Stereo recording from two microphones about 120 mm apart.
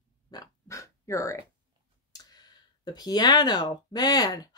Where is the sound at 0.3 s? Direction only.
30° left (ahead or behind).